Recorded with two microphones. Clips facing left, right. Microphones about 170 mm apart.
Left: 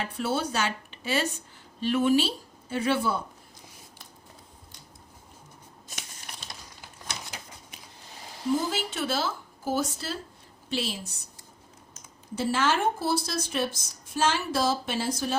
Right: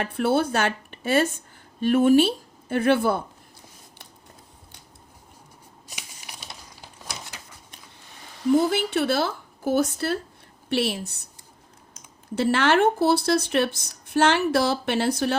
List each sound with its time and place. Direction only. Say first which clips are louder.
0.0 s speech: right 7 dB; 55° right (ahead or behind)
5.9 s a sound: right 1 dB; 5° right (ahead or behind)
8.5 s speech: right 9 dB; 60° right (ahead or behind)
12.4 s speech: right 6 dB; 65° right (ahead or behind)